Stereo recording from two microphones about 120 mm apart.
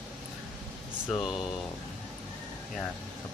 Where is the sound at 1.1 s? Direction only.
Centre (ahead or behind).